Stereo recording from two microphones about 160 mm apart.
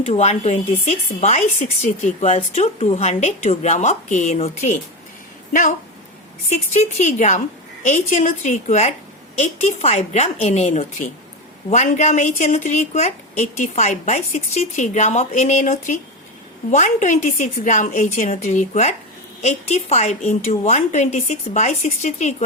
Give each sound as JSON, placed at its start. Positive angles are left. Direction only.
{"t": 0.0, "sound": "speech", "side_deg": 40}
{"t": 6.5, "sound": "speech", "side_deg": 45}